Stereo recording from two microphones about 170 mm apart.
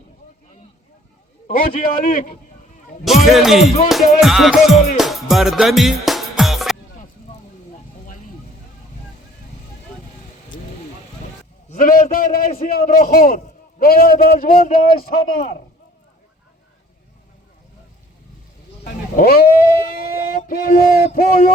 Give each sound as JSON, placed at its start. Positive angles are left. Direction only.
{"t": 1.5, "sound": "a man's voice", "side_deg": 50}
{"t": 3.0, "sound": "a man's voice", "side_deg": 0}
{"t": 3.8, "sound": "music", "side_deg": 0}
{"t": 11.7, "sound": "a man's voice", "side_deg": 50}
{"t": 18.9, "sound": "speech", "side_deg": 60}